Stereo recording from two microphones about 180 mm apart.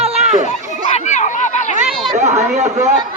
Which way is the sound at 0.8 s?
40° left (ahead or behind).